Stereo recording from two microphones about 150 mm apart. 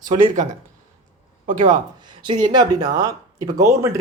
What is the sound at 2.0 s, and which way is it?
Speech, 30° right (ahead or behind).